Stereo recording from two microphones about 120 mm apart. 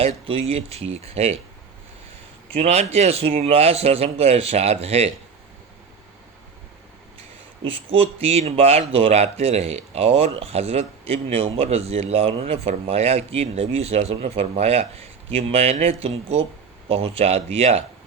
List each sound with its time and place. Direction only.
0.0 s speech: 60° right (ahead or behind)
2.5 s speech: 60° right (ahead or behind)
7.6 s speech: 50° right (ahead or behind)